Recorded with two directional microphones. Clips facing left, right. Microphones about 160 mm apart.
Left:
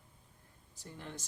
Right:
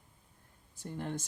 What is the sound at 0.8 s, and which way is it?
Speech, 55° right (ahead or behind).